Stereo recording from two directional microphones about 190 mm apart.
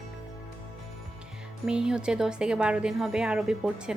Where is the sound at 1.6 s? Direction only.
5° right (ahead or behind).